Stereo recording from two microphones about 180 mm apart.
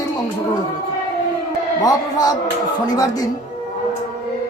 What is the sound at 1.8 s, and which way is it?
Speech, 20° left (ahead or behind).